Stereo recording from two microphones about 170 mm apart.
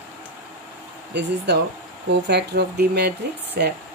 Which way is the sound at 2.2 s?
80° right.